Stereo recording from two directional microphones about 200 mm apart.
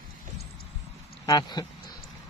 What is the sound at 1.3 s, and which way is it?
Speech, 20° left (ahead or behind).